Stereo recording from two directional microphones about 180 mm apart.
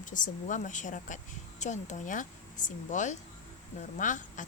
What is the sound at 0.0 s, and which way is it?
A woman's voice, 45° left (ahead or behind).